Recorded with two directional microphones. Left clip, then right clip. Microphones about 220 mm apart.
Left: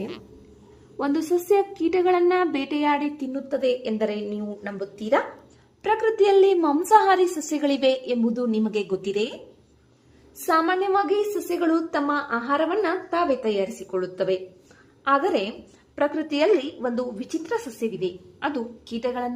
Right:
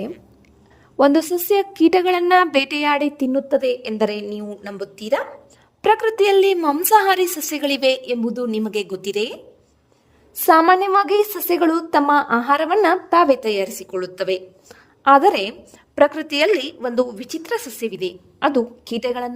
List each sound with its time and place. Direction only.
0.9 s speech: 45° right (ahead or behind)
10.4 s speech: 50° right (ahead or behind)
16.0 s speech: 40° right (ahead or behind)